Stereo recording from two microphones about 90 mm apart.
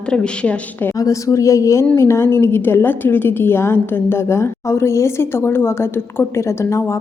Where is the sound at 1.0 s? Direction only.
35° left (ahead or behind).